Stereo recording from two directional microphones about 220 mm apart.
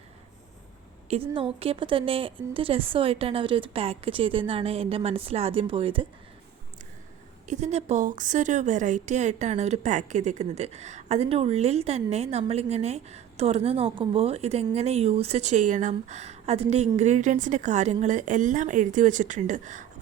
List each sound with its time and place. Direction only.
1.1 s a woman's voice: 25° right (ahead or behind)
7.4 s a woman's voice: 30° right (ahead or behind)